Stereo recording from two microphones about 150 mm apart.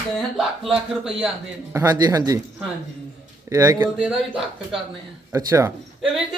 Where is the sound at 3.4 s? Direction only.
20° right (ahead or behind).